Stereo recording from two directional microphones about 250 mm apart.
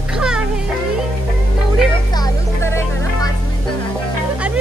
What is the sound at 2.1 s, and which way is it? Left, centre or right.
Music, centre.